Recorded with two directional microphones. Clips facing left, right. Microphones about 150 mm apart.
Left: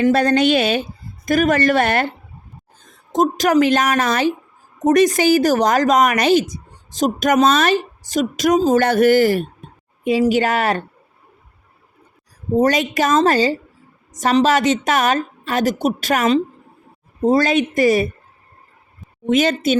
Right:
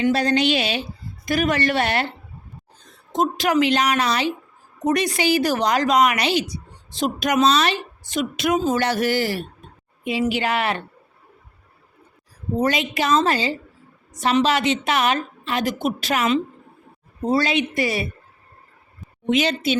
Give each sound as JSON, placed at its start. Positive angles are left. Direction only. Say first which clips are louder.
{"t": 0.0, "sound": "a woman's voice", "louder": "left 4 dB", "side_deg": 55}
{"t": 12.5, "sound": "a woman's voice", "louder": "left 5 dB", "side_deg": 45}
{"t": 19.3, "sound": "a woman's voice", "louder": "left 4 dB", "side_deg": 45}